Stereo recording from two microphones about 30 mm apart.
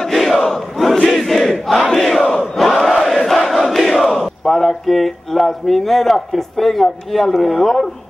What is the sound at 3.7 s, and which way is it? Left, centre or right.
Battle cry, centre.